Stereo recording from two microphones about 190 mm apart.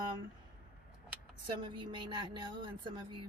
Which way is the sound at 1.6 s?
25° right (ahead or behind).